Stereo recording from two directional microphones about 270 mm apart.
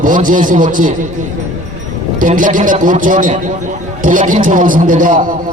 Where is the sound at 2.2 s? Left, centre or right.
Right.